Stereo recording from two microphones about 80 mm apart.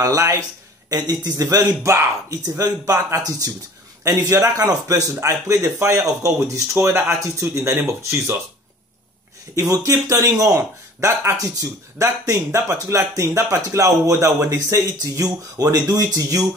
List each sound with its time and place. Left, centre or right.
0.0 s speech: right
0.8 s speech: right
9.6 s speech: right
12.6 s speech: right